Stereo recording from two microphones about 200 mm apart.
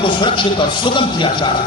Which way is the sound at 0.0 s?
25° left (ahead or behind).